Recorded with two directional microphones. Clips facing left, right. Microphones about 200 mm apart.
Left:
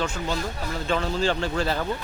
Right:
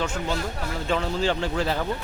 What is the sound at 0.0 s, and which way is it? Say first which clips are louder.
Speech: even; 20° right (ahead or behind).